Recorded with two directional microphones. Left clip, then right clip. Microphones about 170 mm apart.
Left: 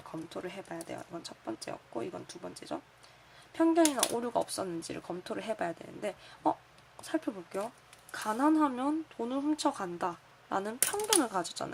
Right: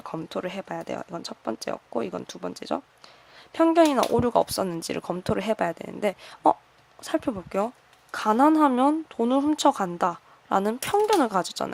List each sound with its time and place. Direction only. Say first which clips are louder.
0.1 s speech: right 9 dB; 50° right (ahead or behind)